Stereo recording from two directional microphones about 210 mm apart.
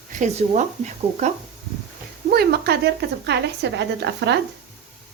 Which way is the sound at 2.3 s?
50° right (ahead or behind).